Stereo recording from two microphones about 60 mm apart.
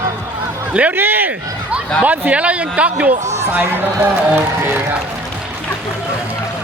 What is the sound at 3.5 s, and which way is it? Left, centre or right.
A man's voice, right.